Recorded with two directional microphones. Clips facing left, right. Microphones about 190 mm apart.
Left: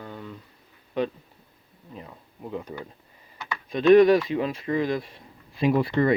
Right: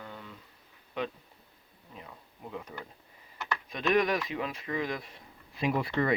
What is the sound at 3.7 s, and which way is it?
Speech, 30° left (ahead or behind).